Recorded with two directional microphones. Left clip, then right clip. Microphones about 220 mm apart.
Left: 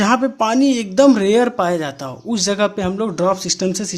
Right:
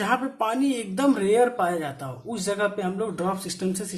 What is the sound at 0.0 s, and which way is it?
Speech, 45° left (ahead or behind).